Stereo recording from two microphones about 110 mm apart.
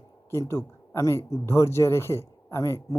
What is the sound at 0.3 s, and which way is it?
Speech, 25° left (ahead or behind).